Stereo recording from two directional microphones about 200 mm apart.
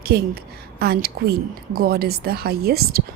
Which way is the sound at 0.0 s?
55° right (ahead or behind).